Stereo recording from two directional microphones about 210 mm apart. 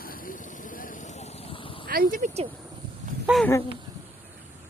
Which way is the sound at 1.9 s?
45° right (ahead or behind).